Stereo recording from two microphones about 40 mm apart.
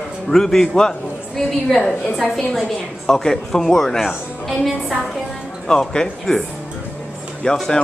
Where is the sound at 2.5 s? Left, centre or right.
Centre.